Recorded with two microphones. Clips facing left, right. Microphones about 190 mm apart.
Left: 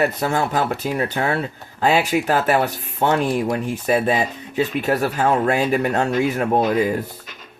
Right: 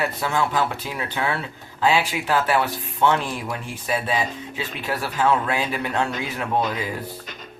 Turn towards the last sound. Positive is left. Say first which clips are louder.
# left 7 dB
turn(degrees=45)  # may be behind; listen again after turning